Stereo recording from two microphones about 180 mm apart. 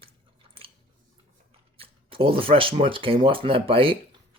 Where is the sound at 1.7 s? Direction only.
30° right (ahead or behind).